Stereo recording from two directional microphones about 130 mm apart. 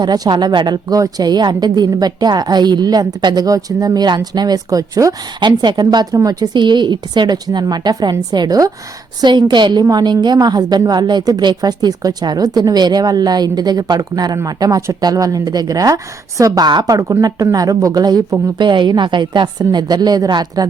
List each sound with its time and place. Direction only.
0.0 s a woman's voice: 35° right (ahead or behind)